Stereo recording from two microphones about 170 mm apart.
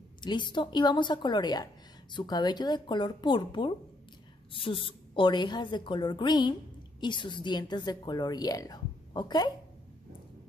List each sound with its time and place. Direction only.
0.2 s a woman's voice: 25° left (ahead or behind)